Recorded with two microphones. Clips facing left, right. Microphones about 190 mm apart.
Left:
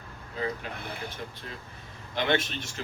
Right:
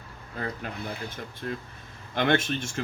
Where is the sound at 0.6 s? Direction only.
50° right (ahead or behind).